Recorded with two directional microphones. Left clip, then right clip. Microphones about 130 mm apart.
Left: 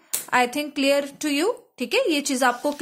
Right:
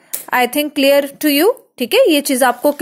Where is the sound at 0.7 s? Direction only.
35° right (ahead or behind).